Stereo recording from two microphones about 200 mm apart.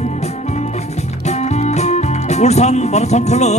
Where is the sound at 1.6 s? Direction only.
35° left (ahead or behind).